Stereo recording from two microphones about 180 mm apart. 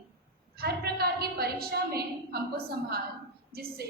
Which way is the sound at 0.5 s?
60° right (ahead or behind).